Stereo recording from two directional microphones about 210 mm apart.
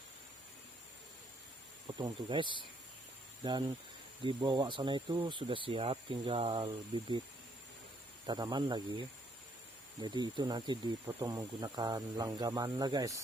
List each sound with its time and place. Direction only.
1.9 s speech: 20° right (ahead or behind)
8.3 s speech: 20° right (ahead or behind)